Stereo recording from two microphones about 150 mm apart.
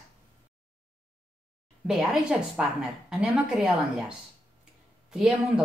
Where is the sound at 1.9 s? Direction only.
5° right (ahead or behind).